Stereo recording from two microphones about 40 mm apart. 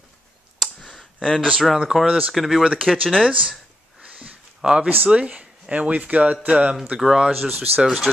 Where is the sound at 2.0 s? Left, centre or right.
Right.